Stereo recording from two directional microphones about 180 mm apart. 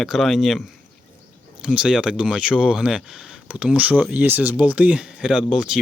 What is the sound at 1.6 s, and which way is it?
Speech, 5° right (ahead or behind).